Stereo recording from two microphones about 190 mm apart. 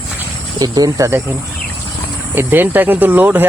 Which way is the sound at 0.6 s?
20° right (ahead or behind).